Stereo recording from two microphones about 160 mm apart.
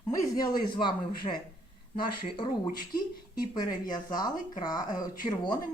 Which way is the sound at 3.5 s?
25° left (ahead or behind).